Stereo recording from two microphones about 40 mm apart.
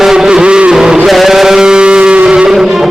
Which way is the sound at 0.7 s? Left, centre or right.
Centre.